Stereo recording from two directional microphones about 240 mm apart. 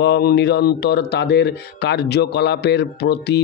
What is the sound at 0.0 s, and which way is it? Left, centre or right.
Speech, left.